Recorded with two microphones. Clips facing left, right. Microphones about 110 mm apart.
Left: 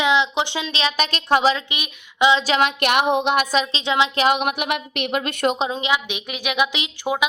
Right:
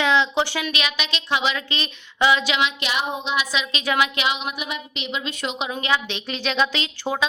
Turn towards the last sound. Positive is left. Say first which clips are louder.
# left 2 dB
turn(degrees=15)  # may be behind; listen again after turning